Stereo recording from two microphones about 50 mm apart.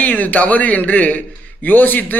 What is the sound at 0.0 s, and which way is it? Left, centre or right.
Speech, left.